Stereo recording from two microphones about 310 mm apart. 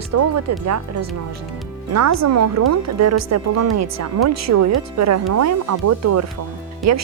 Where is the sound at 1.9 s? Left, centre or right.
Right.